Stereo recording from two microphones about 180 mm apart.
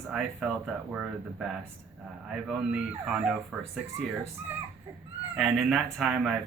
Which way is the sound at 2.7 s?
5° right (ahead or behind).